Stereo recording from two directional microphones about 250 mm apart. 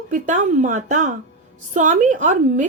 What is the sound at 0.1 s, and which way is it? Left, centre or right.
A woman's voice, right.